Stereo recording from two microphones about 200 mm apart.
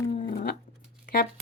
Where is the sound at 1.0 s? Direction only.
45° left (ahead or behind).